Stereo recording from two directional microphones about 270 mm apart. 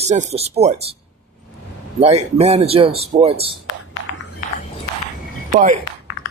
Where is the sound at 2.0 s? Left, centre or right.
Right.